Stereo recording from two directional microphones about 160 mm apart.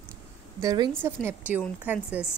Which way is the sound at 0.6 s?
25° right (ahead or behind).